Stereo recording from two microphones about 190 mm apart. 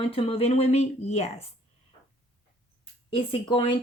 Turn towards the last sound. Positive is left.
turn(degrees=25)  # may be behind; listen again after turning